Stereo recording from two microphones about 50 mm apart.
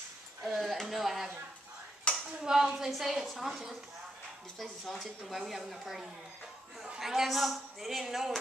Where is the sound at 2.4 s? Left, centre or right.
Centre.